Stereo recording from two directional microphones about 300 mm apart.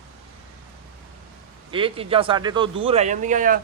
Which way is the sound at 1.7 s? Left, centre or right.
Centre.